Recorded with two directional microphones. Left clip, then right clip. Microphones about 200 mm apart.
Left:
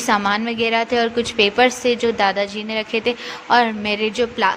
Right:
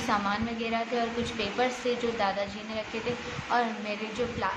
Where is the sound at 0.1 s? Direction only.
50° left (ahead or behind).